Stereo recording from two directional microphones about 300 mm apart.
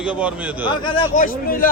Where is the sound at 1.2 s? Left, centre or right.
Left.